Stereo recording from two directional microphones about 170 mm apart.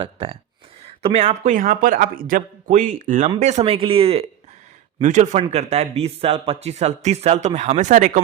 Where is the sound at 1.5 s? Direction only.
50° right (ahead or behind); by 4.2 s 35° right (ahead or behind).